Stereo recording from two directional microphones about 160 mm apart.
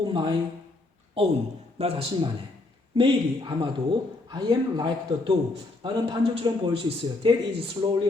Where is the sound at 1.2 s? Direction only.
35° right (ahead or behind).